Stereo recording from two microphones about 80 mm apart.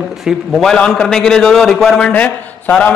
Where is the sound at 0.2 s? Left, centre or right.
Centre.